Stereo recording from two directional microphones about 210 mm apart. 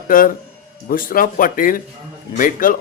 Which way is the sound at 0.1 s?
40° left (ahead or behind).